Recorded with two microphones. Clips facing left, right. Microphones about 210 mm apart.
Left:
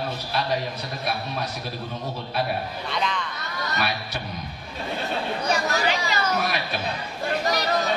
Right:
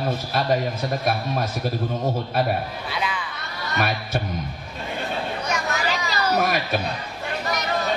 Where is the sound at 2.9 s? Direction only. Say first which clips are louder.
Left 1 dB; 5° right (ahead or behind).